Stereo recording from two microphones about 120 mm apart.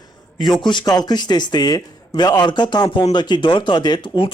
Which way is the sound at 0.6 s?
40° left (ahead or behind).